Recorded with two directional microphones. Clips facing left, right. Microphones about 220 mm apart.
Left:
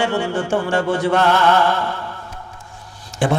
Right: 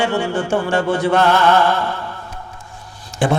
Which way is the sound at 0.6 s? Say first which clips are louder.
Right 1 dB; 20° right (ahead or behind).